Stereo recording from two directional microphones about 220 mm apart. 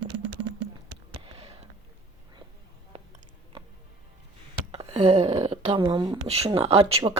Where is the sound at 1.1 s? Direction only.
25° right (ahead or behind).